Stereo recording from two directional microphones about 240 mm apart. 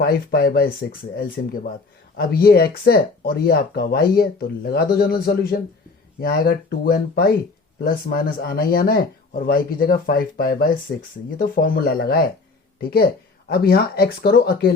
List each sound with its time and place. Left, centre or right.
0.0 s speech: left